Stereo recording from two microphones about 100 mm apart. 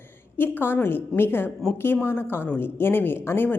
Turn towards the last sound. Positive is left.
turn(degrees=20)  # may be behind; listen again after turning